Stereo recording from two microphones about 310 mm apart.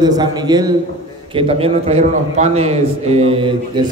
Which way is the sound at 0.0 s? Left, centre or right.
Centre.